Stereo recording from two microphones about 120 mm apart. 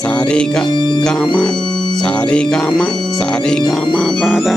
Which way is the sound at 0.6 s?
40° left (ahead or behind).